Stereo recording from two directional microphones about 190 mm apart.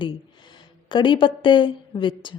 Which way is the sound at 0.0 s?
25° left (ahead or behind).